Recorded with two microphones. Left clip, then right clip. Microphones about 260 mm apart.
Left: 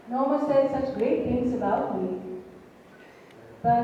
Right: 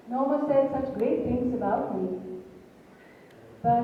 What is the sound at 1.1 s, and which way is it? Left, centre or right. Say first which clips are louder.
Speech: left 2 dB; right.